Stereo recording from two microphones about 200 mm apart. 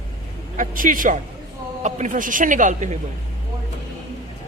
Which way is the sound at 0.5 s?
40° right (ahead or behind).